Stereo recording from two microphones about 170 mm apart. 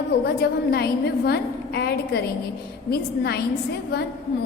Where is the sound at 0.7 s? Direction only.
70° left (ahead or behind).